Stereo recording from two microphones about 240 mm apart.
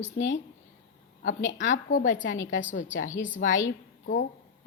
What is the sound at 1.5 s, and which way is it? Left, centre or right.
Speech, left.